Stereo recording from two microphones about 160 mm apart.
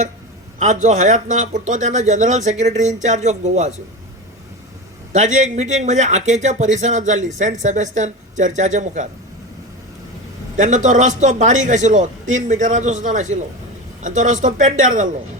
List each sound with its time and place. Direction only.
0.6 s speech: 50° right (ahead or behind)
5.1 s speech: 50° right (ahead or behind)
10.6 s speech: 50° right (ahead or behind)